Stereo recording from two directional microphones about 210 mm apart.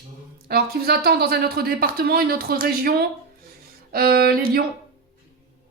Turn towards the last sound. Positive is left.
turn(degrees=-45)  # may be behind; listen again after turning